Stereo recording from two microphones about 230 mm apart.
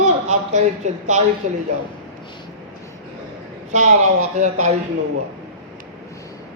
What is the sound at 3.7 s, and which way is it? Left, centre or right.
Speech, right.